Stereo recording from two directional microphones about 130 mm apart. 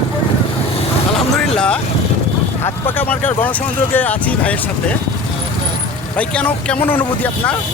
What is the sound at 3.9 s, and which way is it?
Speech, 15° left (ahead or behind).